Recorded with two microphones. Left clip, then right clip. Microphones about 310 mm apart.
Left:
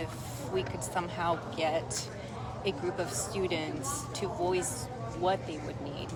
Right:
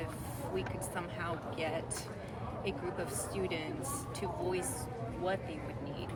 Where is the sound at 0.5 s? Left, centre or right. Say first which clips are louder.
Left 7 dB; centre.